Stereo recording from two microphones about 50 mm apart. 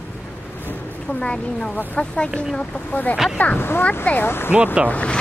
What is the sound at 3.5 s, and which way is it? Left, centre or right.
Speech, left.